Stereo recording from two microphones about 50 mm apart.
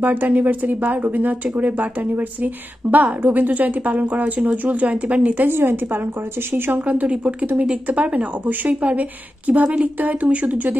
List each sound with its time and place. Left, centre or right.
0.0 s a woman's voice: right